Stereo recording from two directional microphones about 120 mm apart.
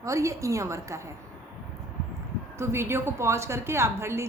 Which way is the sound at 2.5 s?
20° right (ahead or behind).